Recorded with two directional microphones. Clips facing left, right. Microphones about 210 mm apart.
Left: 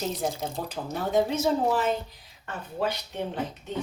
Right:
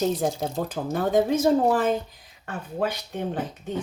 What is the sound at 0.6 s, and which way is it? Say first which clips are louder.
Speech: right 5 dB; 50° right (ahead or behind).